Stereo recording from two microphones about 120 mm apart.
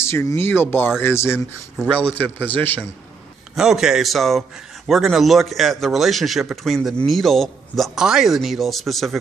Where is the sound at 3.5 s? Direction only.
5° right (ahead or behind).